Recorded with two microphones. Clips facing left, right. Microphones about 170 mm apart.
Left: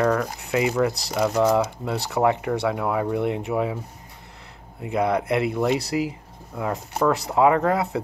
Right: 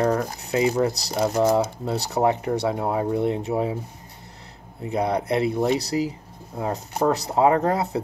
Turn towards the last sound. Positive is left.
turn(degrees=-35)  # may be behind; listen again after turning